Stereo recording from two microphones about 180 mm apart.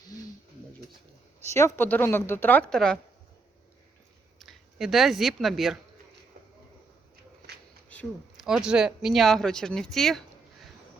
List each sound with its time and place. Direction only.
1.5 s a woman's voice: 15° left (ahead or behind)
4.4 s speech: centre (ahead or behind)
7.9 s a sound: 10° left (ahead or behind)
8.4 s speech: 5° right (ahead or behind)